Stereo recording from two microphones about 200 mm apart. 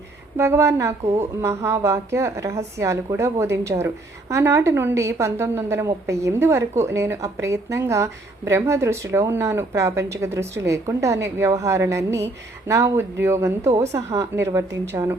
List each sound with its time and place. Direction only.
0.3 s a woman's voice: 15° right (ahead or behind)